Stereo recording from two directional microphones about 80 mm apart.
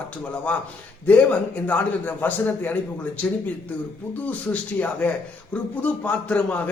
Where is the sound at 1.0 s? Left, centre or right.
Centre.